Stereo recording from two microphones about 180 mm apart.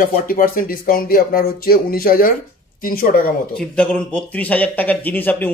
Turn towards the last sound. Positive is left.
turn(degrees=10)  # may be behind; listen again after turning